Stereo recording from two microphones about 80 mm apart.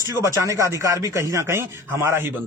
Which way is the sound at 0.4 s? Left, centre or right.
Right.